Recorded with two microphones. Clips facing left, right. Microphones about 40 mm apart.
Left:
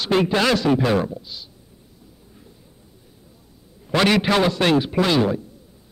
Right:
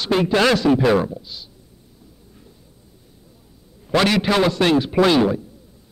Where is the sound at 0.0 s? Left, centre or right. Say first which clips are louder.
Right 2 dB; centre.